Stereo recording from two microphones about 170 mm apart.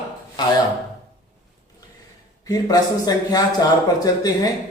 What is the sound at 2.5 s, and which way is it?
Speech, 20° left (ahead or behind).